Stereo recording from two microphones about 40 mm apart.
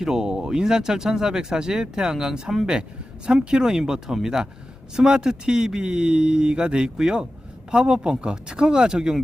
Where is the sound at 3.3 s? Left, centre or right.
Right.